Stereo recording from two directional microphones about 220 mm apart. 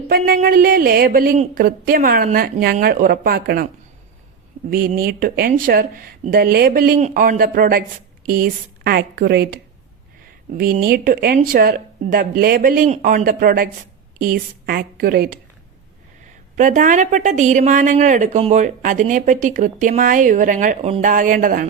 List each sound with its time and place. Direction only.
0.1 s a woman's voice: 45° right (ahead or behind)
4.7 s a woman's voice: 40° right (ahead or behind)
10.6 s a woman's voice: 45° right (ahead or behind)
16.6 s a woman's voice: 35° right (ahead or behind)